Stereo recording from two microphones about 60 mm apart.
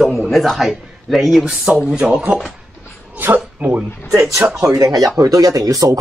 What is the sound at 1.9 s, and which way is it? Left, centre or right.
Speech, centre.